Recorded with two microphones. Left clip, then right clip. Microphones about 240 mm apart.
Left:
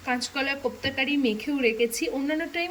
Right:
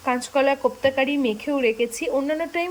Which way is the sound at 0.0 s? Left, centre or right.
Centre.